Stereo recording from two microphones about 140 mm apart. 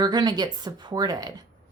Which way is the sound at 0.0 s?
30° right (ahead or behind).